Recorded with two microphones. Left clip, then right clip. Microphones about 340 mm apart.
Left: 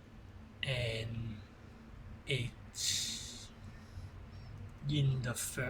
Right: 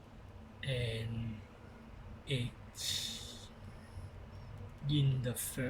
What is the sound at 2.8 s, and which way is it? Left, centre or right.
Snort, left.